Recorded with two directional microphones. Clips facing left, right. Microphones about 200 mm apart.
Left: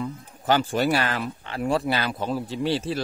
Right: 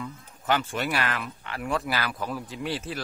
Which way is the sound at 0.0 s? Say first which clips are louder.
Left 6 dB; 35° left (ahead or behind).